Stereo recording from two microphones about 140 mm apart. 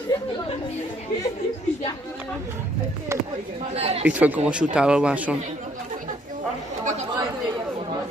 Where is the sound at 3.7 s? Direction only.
50° right (ahead or behind).